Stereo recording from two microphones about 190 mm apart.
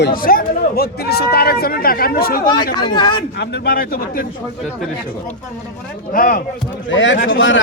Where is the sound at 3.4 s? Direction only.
55° left (ahead or behind).